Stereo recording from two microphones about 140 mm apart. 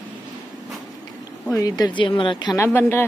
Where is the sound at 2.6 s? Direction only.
15° left (ahead or behind).